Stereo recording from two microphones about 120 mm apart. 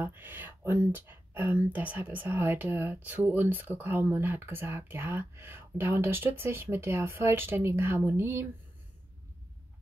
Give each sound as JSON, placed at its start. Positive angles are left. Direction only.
{"t": 0.0, "sound": "speech", "side_deg": -15}